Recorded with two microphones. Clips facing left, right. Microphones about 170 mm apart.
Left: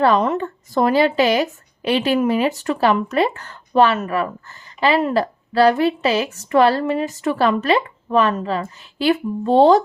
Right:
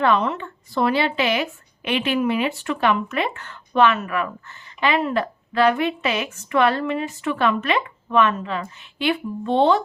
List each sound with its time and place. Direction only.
0.0 s a woman's voice: 40° left (ahead or behind)